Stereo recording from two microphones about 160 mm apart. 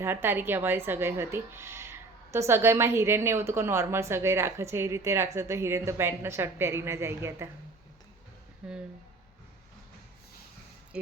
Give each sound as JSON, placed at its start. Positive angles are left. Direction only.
{"t": 0.0, "sound": "a woman's voice", "side_deg": -15}
{"t": 8.6, "sound": "speech", "side_deg": -5}
{"t": 10.9, "sound": "speech", "side_deg": -5}